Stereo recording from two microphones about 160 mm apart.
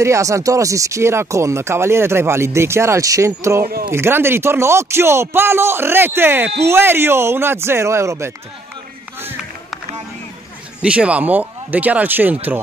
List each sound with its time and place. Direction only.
0.0 s speech: 20° right (ahead or behind)
10.8 s speech: 5° right (ahead or behind)